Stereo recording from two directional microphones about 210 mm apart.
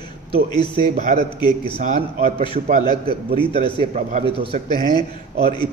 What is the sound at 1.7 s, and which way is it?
Speech, 35° right (ahead or behind).